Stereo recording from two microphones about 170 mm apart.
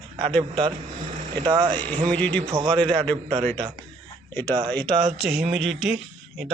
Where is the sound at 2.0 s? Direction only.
10° left (ahead or behind).